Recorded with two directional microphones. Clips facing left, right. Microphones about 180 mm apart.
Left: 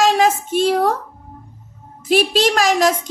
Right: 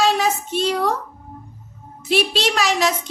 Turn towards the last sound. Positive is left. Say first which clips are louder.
# left 4 dB
turn(degrees=45)  # may be behind; listen again after turning